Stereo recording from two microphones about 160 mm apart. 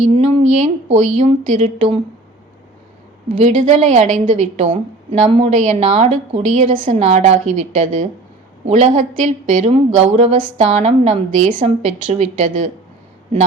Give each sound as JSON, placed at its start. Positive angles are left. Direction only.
{"t": 0.0, "sound": "a woman's voice", "side_deg": -45}
{"t": 3.3, "sound": "a woman's voice", "side_deg": -50}